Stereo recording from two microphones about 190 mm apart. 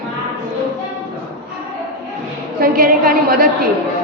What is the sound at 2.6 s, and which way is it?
Speech, 50° right (ahead or behind).